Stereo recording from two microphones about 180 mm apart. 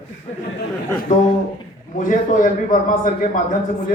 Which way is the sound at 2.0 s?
50° left (ahead or behind).